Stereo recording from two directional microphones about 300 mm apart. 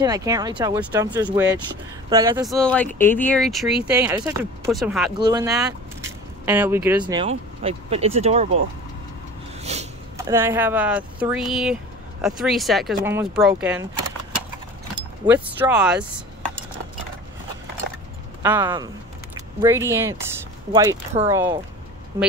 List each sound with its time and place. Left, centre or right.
0.0 s speech: centre
2.4 s speech: centre
5.2 s speech: centre
9.6 s a sound: right
10.1 s speech: centre
15.2 s speech: centre
18.4 s speech: centre